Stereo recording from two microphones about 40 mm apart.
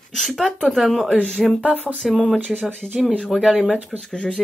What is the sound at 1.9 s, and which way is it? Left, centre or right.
Speech, right.